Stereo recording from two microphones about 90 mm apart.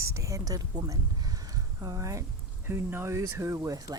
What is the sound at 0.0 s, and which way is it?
Speech, 35° right (ahead or behind).